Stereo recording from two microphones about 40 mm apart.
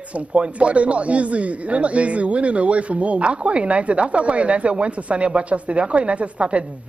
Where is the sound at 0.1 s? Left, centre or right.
Right.